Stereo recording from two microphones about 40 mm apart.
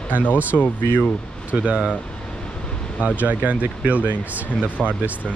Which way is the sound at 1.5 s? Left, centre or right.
Right.